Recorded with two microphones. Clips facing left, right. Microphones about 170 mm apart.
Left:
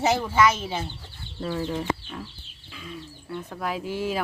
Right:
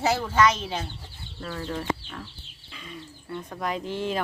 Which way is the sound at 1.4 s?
20° left (ahead or behind).